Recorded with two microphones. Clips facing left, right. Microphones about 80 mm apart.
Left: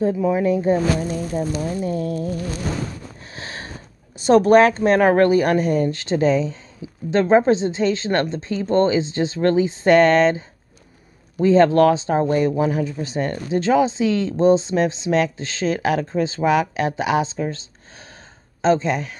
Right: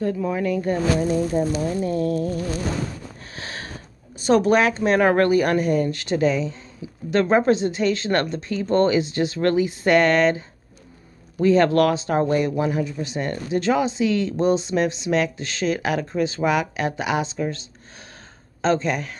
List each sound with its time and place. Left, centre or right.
0.0 s a woman's voice: centre
1.1 s speech: centre
1.7 s speech: centre
3.3 s sniff: left
4.2 s a woman's voice: left
11.4 s a woman's voice: left